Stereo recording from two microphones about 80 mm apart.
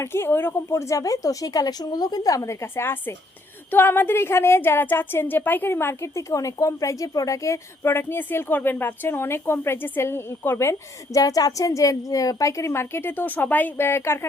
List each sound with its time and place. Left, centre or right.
0.0 s speech: left
0.7 s a woman's voice: left